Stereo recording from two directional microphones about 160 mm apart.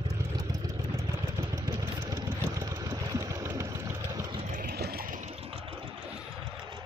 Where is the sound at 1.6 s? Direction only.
25° right (ahead or behind).